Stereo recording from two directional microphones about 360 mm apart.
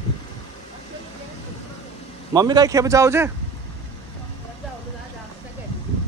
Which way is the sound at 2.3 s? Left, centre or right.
Centre.